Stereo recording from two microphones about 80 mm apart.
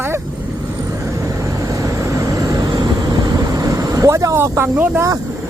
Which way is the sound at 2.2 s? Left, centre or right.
Right.